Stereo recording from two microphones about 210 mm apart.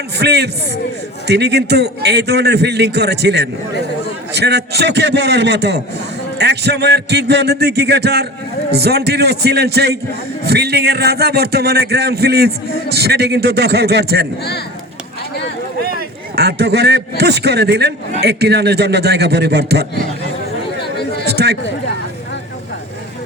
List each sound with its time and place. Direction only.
0.2 s a man's voice: 50° right (ahead or behind)
15.9 s a man's voice: 50° right (ahead or behind)
21.0 s a sound: 50° left (ahead or behind)
21.2 s speech: 50° right (ahead or behind)